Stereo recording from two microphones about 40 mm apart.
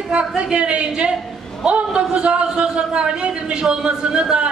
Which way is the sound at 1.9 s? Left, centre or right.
Right.